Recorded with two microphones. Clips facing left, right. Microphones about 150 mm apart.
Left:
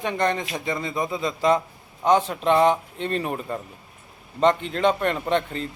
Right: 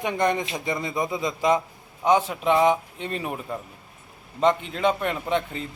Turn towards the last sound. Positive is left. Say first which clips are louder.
# left 2 dB
turn(degrees=-5)  # may be behind; listen again after turning